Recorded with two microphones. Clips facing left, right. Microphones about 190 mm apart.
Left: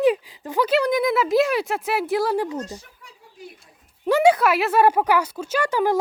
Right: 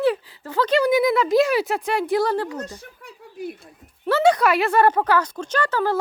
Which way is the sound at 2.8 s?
60° right (ahead or behind).